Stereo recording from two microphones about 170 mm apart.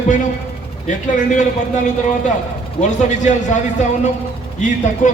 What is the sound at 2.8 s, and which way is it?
A man's voice, 45° left (ahead or behind).